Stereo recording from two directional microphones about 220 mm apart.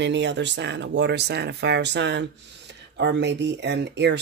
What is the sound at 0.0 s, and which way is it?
Speech, 55° right (ahead or behind).